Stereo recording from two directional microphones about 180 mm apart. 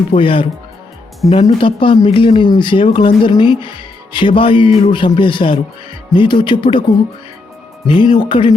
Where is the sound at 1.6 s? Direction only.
30° left (ahead or behind).